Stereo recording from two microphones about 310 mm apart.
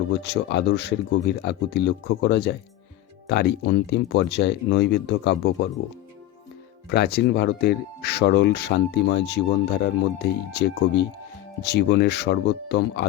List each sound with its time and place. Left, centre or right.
0.2 s speech: left
6.9 s speech: left